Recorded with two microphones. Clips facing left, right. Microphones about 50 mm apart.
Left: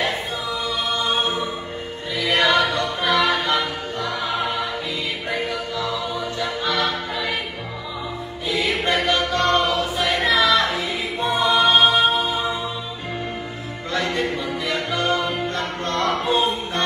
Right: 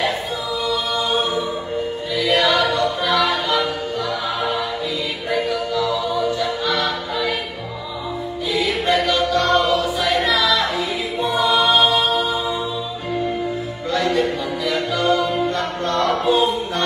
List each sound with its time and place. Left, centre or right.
2.1 s choir: left
5.3 s music: left
8.5 s choir: left
13.9 s music: left
16.3 s a capella: left